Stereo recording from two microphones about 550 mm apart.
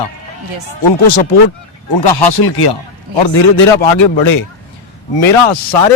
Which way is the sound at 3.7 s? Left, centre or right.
Left.